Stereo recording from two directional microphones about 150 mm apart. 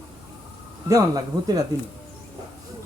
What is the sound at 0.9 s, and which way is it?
Speech, 25° right (ahead or behind).